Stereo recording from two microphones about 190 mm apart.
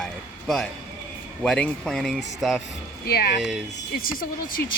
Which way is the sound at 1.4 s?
5° left (ahead or behind).